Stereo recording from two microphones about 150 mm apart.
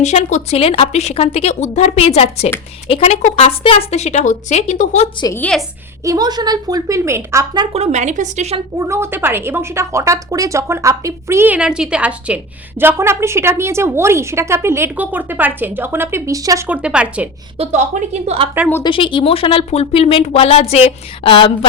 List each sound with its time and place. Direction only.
0.0 s speech: 50° left (ahead or behind)
5.4 s a woman's voice: 5° left (ahead or behind)
6.1 s speech: 25° right (ahead or behind)
7.7 s a woman's voice: 45° right (ahead or behind)
8.8 s a woman's voice: 20° right (ahead or behind)
16.6 s a woman's voice: 10° right (ahead or behind)
17.6 s a woman's voice: 50° right (ahead or behind)
18.8 s speech: 35° left (ahead or behind)